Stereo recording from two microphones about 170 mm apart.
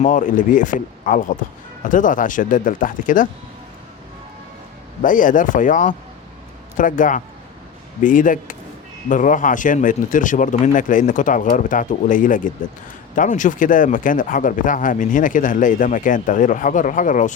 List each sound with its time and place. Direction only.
0.0 s speech: 50° left (ahead or behind)
5.0 s speech: 50° left (ahead or behind)